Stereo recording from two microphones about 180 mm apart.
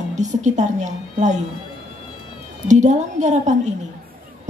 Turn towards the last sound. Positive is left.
turn(degrees=-40)  # may be behind; listen again after turning